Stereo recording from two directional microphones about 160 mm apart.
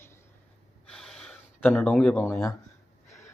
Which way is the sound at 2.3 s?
20° left (ahead or behind).